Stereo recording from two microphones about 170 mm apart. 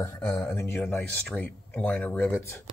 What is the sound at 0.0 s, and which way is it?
Speech, 10° left (ahead or behind).